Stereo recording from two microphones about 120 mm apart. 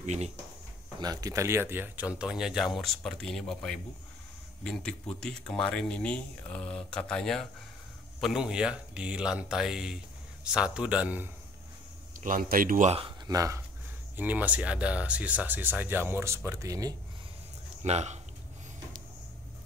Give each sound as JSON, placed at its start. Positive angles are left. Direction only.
{"t": 0.0, "sound": "speech", "side_deg": -75}
{"t": 1.0, "sound": "speech", "side_deg": -30}
{"t": 8.2, "sound": "speech", "side_deg": -5}
{"t": 12.2, "sound": "speech", "side_deg": -90}
{"t": 13.3, "sound": "speech", "side_deg": -30}
{"t": 14.1, "sound": "speech", "side_deg": -15}
{"t": 17.8, "sound": "speech", "side_deg": -70}